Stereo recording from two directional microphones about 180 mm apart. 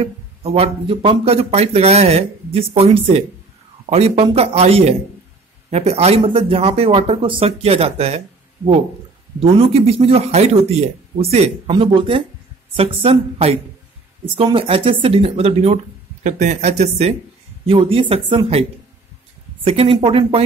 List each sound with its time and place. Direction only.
0.0 s speech: 35° right (ahead or behind)
9.4 s speech: 30° right (ahead or behind)